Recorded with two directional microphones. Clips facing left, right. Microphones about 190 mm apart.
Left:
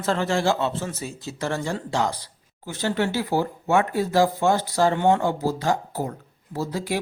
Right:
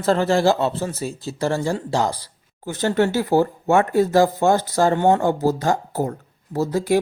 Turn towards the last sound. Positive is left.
turn(degrees=-45)  # may be behind; listen again after turning